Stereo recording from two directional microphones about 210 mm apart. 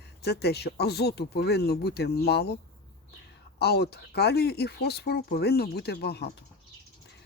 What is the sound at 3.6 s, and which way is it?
Speech, 50° left (ahead or behind).